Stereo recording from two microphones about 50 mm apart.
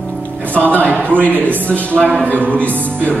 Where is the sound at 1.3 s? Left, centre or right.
Right.